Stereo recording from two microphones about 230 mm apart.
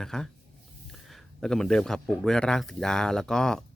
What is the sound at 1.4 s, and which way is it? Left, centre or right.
Speech, centre.